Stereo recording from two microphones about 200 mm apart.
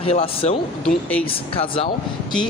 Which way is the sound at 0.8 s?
10° left (ahead or behind).